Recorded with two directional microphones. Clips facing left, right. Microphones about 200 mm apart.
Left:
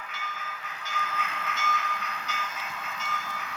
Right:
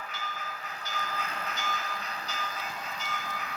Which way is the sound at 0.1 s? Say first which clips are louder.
Even; 35° right (ahead or behind).